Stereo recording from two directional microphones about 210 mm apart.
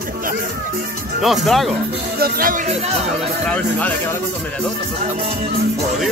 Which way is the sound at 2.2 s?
45° right (ahead or behind).